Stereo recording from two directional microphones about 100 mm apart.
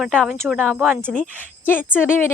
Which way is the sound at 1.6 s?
20° left (ahead or behind).